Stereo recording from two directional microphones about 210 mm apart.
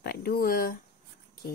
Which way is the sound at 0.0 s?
50° left (ahead or behind).